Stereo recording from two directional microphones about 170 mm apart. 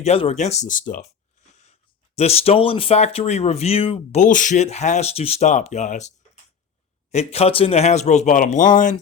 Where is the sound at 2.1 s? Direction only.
35° left (ahead or behind).